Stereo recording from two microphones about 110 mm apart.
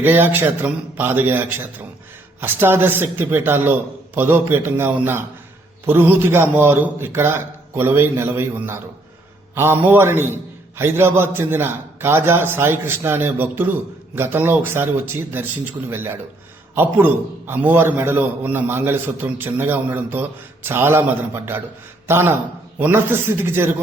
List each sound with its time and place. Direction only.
0.0 s a man's voice: 20° right (ahead or behind)